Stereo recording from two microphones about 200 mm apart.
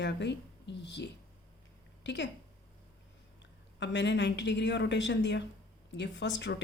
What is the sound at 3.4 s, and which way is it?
A woman's voice, 60° left (ahead or behind).